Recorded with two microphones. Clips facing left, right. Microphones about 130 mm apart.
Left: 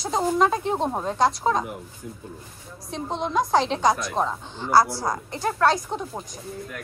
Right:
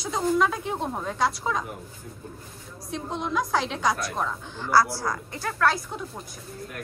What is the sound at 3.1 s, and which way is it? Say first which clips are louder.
A woman's voice: left 4 dB; 30° left (ahead or behind).